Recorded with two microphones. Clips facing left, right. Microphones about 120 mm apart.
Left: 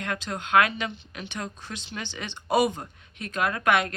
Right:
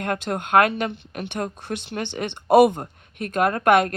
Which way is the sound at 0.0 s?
50° right (ahead or behind).